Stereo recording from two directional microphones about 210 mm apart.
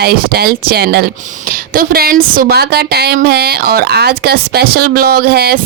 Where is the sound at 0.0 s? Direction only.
45° right (ahead or behind).